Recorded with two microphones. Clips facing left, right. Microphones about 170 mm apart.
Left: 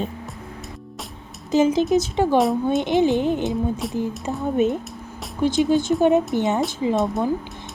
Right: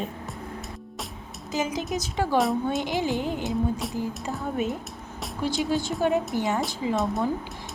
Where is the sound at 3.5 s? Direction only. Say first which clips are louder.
Left 3 dB; centre (ahead or behind).